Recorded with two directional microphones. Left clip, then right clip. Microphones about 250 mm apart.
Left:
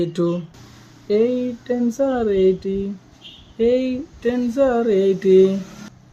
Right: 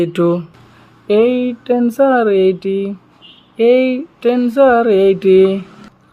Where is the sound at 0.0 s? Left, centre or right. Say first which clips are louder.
Right 7 dB; centre.